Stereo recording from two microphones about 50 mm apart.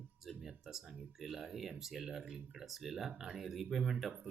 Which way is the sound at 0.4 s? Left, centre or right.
Centre.